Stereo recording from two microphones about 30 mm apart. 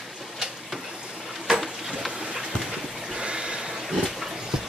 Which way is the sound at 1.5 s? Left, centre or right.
Centre.